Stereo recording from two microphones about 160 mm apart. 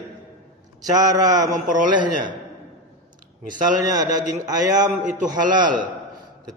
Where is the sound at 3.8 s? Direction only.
20° right (ahead or behind).